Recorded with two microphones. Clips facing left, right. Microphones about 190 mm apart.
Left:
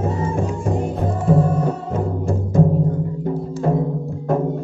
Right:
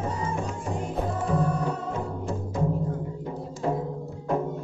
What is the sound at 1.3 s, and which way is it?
Music, 50° left (ahead or behind).